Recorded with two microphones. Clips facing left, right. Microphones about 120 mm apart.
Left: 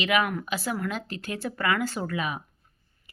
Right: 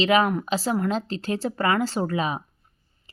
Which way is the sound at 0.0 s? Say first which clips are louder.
Right 5 dB; 30° right (ahead or behind).